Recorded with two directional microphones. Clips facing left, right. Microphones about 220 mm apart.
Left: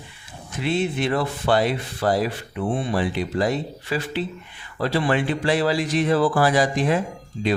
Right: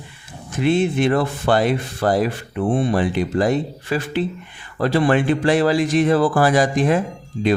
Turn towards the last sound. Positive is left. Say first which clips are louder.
# right 4 dB
turn(degrees=-45)  # may be behind; listen again after turning